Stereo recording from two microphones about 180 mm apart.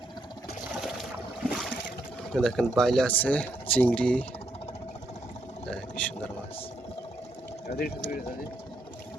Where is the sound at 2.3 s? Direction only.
5° left (ahead or behind).